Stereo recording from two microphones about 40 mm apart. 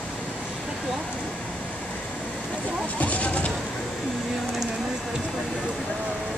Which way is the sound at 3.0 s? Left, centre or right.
Left.